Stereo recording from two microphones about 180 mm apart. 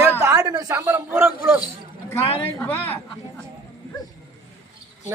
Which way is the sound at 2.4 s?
10° left (ahead or behind).